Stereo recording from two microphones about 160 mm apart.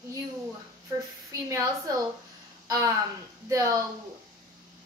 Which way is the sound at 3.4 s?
20° right (ahead or behind).